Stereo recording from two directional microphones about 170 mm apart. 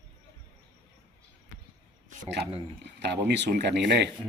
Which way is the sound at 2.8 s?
85° right.